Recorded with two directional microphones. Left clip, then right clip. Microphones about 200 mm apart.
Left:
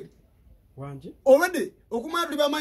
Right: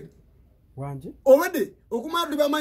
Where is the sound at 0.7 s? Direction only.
35° right (ahead or behind).